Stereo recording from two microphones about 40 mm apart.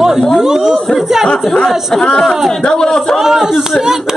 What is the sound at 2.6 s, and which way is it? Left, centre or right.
Speech, centre.